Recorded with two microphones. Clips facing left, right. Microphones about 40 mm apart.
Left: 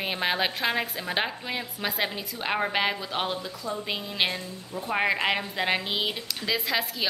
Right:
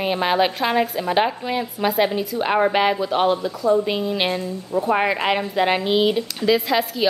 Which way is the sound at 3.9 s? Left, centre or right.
Centre.